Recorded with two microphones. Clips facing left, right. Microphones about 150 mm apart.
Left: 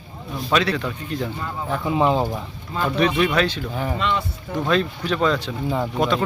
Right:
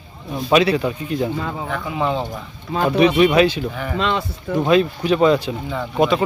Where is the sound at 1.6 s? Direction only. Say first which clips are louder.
Left 5 dB; 30° left (ahead or behind).